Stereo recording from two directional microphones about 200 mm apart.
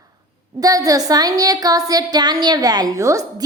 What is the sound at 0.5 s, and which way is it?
A woman's voice, 15° right (ahead or behind).